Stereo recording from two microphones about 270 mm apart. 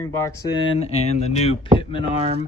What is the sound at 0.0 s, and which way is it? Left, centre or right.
Speech, centre.